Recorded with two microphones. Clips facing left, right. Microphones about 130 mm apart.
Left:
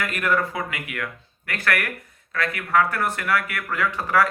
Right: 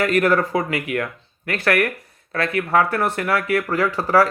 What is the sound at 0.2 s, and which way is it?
Speech, 40° right (ahead or behind).